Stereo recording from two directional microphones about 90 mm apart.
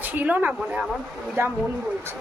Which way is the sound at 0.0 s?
20° right (ahead or behind).